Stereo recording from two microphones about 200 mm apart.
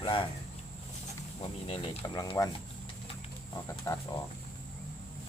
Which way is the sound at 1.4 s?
25° left (ahead or behind).